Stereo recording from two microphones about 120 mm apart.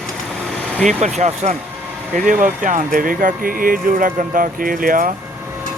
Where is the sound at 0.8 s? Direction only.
80° right.